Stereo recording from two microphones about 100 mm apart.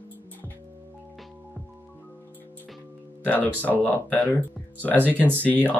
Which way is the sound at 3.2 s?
15° left (ahead or behind).